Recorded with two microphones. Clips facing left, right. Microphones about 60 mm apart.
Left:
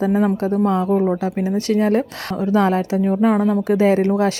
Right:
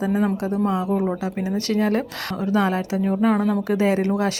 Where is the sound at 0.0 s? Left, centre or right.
Left.